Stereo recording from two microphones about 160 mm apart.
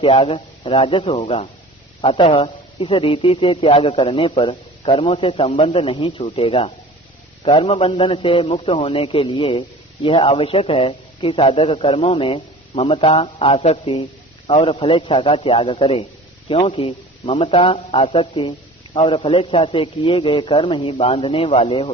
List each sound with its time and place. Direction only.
0.0 s a man's voice: 35° left (ahead or behind)